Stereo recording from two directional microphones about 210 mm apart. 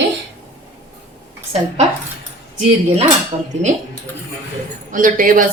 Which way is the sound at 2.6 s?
30° right (ahead or behind).